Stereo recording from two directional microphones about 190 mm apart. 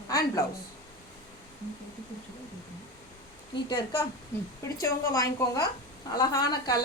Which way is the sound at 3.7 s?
20° left (ahead or behind).